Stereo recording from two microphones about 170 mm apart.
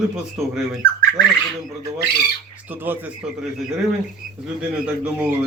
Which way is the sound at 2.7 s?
10° right (ahead or behind).